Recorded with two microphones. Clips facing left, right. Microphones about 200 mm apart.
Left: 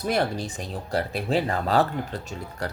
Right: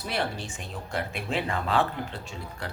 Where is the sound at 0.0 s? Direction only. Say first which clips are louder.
Left 6 dB; 40° left (ahead or behind).